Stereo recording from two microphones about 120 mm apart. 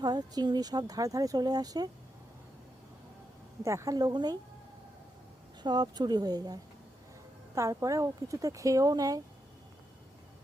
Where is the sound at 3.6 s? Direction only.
25° right (ahead or behind).